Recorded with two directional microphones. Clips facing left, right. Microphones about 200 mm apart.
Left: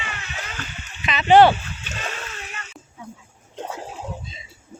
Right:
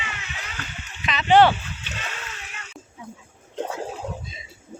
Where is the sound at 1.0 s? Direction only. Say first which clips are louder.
Left 3 dB; 10° left (ahead or behind).